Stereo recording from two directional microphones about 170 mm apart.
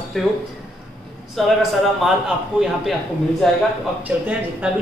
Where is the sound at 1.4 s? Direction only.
Centre (ahead or behind).